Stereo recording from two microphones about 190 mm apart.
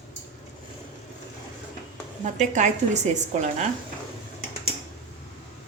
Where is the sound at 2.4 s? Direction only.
40° right (ahead or behind).